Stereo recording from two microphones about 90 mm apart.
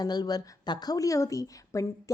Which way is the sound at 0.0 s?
50° left (ahead or behind).